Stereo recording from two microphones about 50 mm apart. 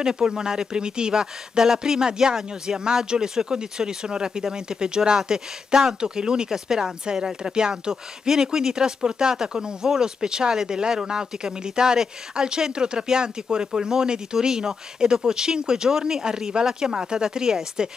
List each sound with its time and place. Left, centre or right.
0.0 s speech: centre